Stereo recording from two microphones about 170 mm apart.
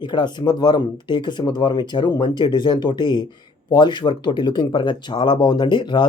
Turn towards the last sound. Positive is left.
turn(degrees=25)  # may be behind; listen again after turning